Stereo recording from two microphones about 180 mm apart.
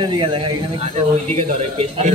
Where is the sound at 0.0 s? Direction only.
25° right (ahead or behind).